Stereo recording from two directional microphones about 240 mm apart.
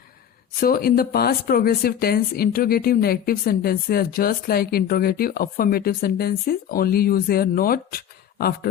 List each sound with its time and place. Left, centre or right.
0.6 s speech: left